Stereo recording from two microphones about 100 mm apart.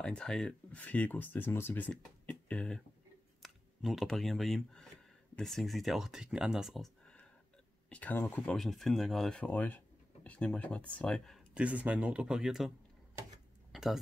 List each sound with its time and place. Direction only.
0.0 s speech: 10° left (ahead or behind)
3.4 s speech: centre (ahead or behind)
7.9 s speech: 15° left (ahead or behind)
11.5 s speech: 15° right (ahead or behind)
13.7 s a sound: 5° right (ahead or behind)